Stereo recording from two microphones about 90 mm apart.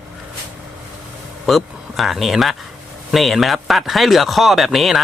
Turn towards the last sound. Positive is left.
turn(degrees=0)  # may be behind; listen again after turning